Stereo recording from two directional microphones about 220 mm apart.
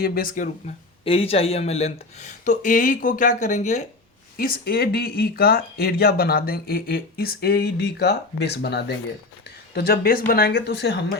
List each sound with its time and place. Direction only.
0.0 s speech: 40° left (ahead or behind)
1.0 s speech: 25° left (ahead or behind)
4.4 s speech: 45° left (ahead or behind)